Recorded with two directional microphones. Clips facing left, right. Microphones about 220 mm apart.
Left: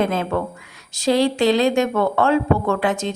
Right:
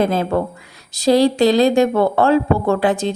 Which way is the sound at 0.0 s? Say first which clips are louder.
Right 3 dB; 35° right (ahead or behind).